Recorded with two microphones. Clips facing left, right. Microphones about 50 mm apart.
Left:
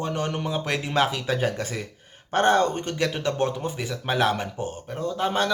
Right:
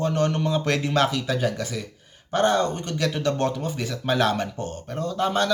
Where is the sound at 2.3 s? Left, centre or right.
Left; by 3.5 s centre.